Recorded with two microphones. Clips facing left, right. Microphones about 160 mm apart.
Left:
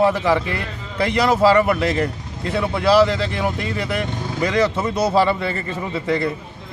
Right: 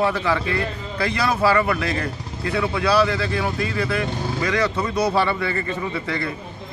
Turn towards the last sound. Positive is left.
turn(degrees=25)  # may be behind; listen again after turning